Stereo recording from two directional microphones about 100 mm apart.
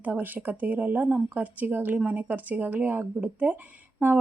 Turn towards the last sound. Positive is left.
turn(degrees=-20)  # may be behind; listen again after turning